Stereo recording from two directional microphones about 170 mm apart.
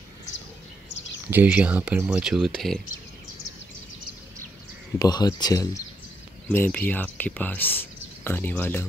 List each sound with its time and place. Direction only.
1.3 s speech: 10° right (ahead or behind)
4.9 s speech: 20° left (ahead or behind)
6.5 s speech: 10° left (ahead or behind)